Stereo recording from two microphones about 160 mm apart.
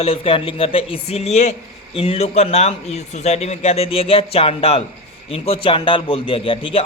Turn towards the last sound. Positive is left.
turn(degrees=35)  # may be behind; listen again after turning